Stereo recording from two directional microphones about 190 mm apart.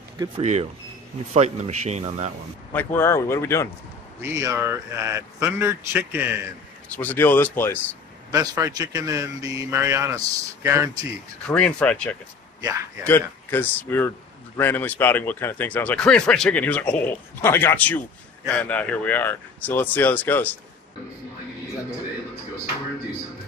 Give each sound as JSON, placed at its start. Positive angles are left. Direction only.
{"t": 0.4, "sound": "speech", "side_deg": -35}
{"t": 2.7, "sound": "speech", "side_deg": 10}
{"t": 4.2, "sound": "a man's voice", "side_deg": -15}
{"t": 7.0, "sound": "speech", "side_deg": 10}
{"t": 8.3, "sound": "a man's voice", "side_deg": -20}
{"t": 11.4, "sound": "speech", "side_deg": 5}